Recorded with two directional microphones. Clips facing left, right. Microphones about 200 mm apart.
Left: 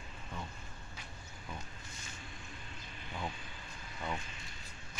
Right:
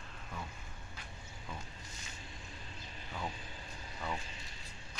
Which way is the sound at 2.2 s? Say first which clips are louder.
Even; 35° right (ahead or behind).